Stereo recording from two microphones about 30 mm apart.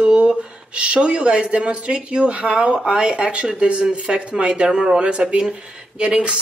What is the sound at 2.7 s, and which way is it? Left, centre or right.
Speech, right.